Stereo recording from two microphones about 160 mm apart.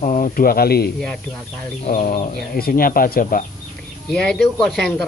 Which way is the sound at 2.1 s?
65° left (ahead or behind).